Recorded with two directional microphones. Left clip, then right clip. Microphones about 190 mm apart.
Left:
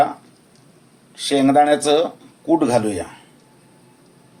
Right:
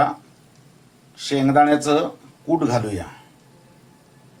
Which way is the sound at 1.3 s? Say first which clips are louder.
Left 2 dB; 35° left (ahead or behind).